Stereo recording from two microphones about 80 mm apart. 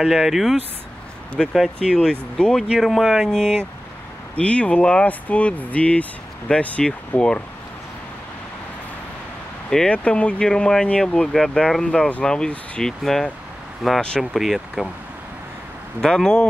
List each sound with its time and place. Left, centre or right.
0.0 s speech: centre
2.8 s speech: centre
9.7 s speech: centre
16.0 s speech: centre